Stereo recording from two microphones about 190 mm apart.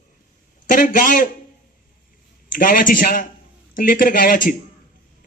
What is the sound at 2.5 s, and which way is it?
A man's voice, 45° left (ahead or behind).